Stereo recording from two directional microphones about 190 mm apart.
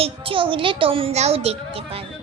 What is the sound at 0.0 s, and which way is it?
A child's voice, 25° right (ahead or behind).